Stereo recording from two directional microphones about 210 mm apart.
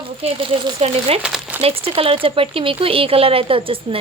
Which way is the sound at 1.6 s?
25° right (ahead or behind).